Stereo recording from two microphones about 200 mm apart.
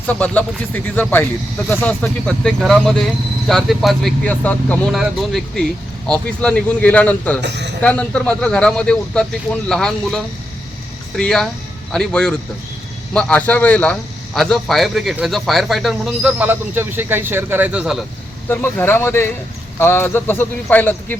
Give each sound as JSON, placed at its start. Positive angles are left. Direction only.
{"t": 0.1, "sound": "speech", "side_deg": 10}
{"t": 7.4, "sound": "speech", "side_deg": -60}
{"t": 7.8, "sound": "speech", "side_deg": 5}
{"t": 18.4, "sound": "speech", "side_deg": 10}